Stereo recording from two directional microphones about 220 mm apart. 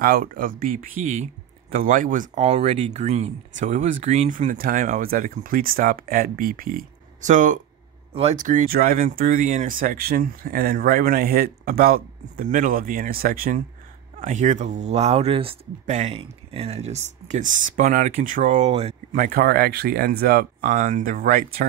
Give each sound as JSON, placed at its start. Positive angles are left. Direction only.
{"t": 0.0, "sound": "speech", "side_deg": -40}